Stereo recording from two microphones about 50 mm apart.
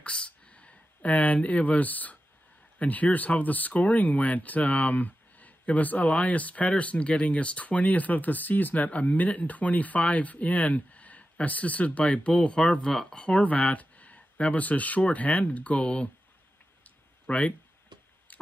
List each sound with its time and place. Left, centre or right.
0.0 s a sound: left
2.8 s speech: left
17.3 s speech: left